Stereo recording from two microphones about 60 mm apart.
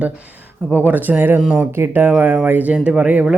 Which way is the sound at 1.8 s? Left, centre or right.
Right.